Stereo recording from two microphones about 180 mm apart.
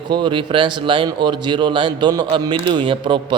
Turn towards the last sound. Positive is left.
turn(degrees=-25)  # may be behind; listen again after turning